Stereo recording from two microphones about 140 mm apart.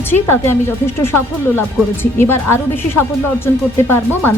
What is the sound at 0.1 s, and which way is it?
Speech, 15° left (ahead or behind).